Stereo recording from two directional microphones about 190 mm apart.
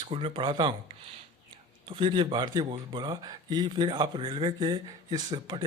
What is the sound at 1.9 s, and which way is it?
A man's voice, 25° right (ahead or behind).